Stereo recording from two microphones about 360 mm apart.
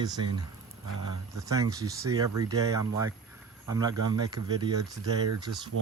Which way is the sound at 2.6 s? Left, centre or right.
Centre.